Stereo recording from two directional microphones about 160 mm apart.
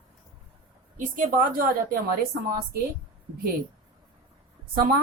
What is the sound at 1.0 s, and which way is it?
A woman's voice, 55° right (ahead or behind).